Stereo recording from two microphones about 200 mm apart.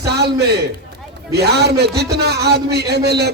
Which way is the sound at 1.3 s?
55° right (ahead or behind).